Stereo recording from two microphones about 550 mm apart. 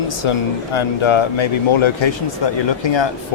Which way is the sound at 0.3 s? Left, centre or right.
Left.